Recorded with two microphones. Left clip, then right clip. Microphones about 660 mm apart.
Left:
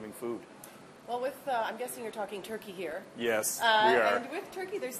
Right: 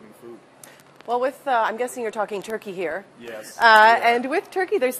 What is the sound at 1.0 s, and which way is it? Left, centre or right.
A woman's voice, right.